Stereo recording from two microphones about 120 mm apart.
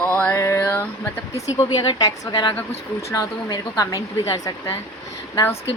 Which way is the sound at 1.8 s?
40° left (ahead or behind).